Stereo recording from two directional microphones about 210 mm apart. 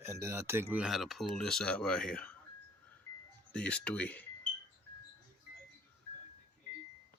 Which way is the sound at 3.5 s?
5° left (ahead or behind).